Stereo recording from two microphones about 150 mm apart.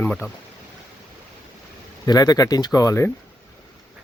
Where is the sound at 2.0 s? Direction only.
25° left (ahead or behind).